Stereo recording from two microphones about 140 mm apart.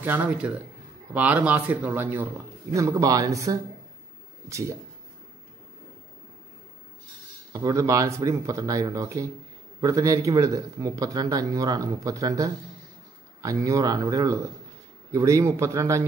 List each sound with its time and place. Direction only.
0.0 s speech: 10° right (ahead or behind)
7.5 s speech: 25° right (ahead or behind)